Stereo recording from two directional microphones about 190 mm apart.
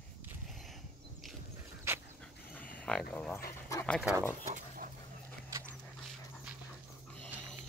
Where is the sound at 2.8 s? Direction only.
5° left (ahead or behind).